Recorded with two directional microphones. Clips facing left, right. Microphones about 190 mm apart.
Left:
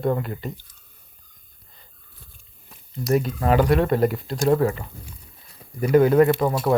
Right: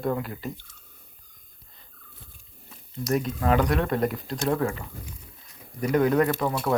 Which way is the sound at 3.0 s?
5° left (ahead or behind).